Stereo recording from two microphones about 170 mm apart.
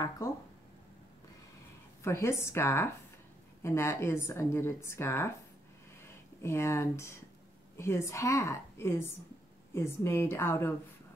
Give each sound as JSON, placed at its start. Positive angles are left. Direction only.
{"t": 2.0, "sound": "speech", "side_deg": 15}
{"t": 6.4, "sound": "speech", "side_deg": 15}